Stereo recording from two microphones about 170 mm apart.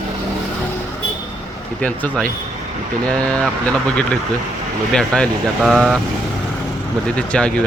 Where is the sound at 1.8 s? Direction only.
10° left (ahead or behind).